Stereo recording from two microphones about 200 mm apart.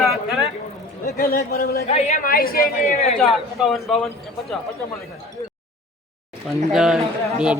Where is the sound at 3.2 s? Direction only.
Centre (ahead or behind).